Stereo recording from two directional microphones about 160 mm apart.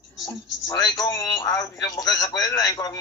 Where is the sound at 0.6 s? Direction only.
25° left (ahead or behind).